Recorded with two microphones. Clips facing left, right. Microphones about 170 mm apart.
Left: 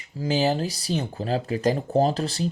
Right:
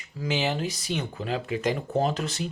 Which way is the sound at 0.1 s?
35° left (ahead or behind).